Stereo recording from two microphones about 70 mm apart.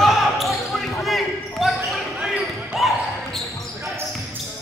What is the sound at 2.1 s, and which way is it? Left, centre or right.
Basketball bounce, centre.